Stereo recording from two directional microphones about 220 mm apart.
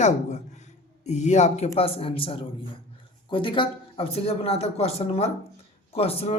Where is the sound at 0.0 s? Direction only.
30° left (ahead or behind).